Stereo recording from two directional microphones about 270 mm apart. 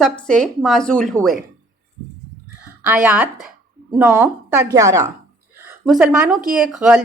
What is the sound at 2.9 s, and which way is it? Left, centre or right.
A woman's voice, centre.